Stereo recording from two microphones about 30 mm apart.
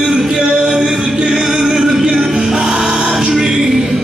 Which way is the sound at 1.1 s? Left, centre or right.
Right.